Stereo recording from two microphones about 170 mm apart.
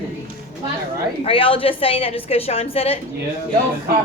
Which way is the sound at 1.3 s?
35° left (ahead or behind).